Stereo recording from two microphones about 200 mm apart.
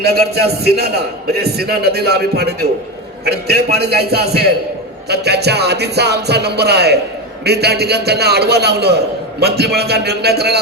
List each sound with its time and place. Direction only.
0.0 s a man's voice: 55° right (ahead or behind)